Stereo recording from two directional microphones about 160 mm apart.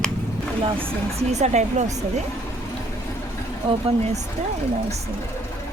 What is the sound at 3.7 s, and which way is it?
Speech, 40° right (ahead or behind).